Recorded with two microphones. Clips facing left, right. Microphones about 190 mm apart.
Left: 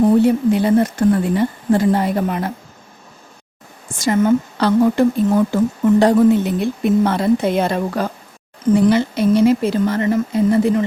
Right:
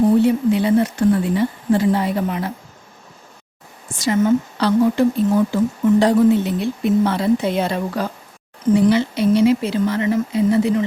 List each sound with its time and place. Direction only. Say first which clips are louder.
0.2 s a woman's voice: left 2 dB; 45° left (ahead or behind)
3.9 s a woman's voice: left 1 dB; 50° left (ahead or behind)